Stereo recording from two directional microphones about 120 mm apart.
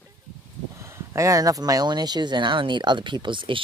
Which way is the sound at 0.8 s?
25° right (ahead or behind).